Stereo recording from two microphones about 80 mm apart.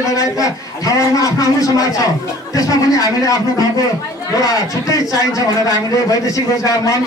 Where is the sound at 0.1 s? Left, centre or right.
Left.